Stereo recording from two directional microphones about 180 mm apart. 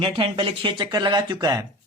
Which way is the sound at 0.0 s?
30° right (ahead or behind).